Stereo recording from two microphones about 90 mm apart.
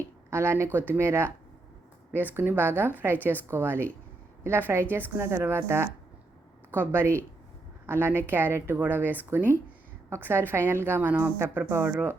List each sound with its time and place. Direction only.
0.3 s a woman's voice: 30° right (ahead or behind)